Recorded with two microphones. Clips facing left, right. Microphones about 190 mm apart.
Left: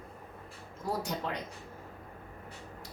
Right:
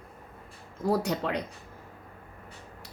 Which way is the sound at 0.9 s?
70° right (ahead or behind).